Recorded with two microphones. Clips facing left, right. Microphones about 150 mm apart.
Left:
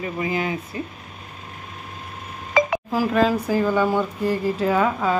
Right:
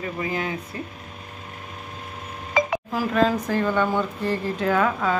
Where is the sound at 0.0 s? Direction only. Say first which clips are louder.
Left 3 dB; 5° left (ahead or behind).